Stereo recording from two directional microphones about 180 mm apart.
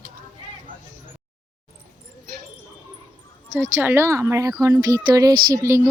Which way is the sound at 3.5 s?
15° right (ahead or behind).